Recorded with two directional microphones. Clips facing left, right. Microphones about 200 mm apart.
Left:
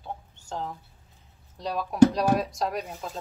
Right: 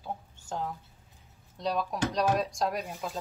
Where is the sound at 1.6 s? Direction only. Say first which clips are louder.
Left 10 dB; 5° left (ahead or behind).